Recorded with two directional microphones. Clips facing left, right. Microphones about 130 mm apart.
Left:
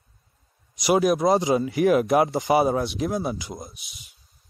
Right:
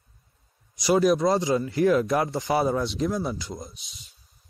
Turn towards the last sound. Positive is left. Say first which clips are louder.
# left 1 dB
turn(degrees=5)  # may be behind; listen again after turning